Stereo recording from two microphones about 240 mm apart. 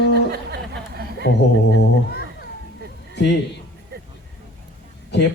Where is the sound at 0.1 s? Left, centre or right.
Right.